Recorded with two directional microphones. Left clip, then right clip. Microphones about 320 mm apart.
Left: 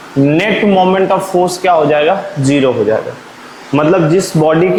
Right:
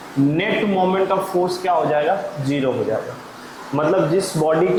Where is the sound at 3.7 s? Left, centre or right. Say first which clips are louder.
Left 8 dB; right.